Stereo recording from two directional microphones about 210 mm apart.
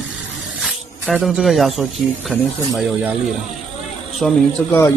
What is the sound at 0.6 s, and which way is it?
Speech, centre (ahead or behind).